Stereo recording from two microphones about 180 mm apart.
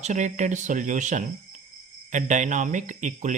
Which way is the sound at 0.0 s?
40° right (ahead or behind).